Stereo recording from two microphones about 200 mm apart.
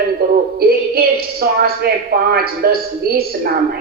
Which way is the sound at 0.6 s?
50° right (ahead or behind).